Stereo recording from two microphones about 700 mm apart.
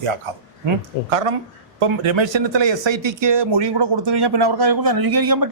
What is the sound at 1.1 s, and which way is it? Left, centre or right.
Speech, right.